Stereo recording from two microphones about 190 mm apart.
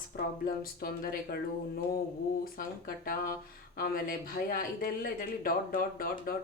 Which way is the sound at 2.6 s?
50° left (ahead or behind).